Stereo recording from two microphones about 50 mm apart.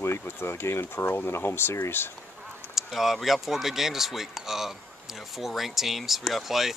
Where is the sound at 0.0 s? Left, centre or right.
Left.